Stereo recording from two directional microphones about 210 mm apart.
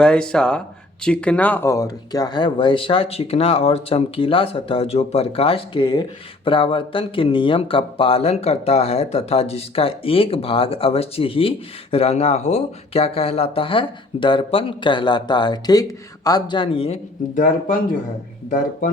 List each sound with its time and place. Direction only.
0.0 s speech: 5° left (ahead or behind); by 17.7 s 40° left (ahead or behind)